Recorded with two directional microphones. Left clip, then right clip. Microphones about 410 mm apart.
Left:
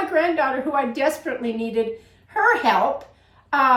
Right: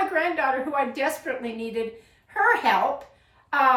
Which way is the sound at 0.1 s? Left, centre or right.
Centre.